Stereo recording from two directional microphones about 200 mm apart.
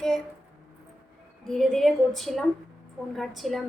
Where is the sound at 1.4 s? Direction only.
Centre (ahead or behind).